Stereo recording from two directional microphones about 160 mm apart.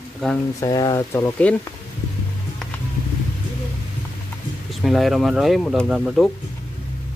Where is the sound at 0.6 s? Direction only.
20° left (ahead or behind).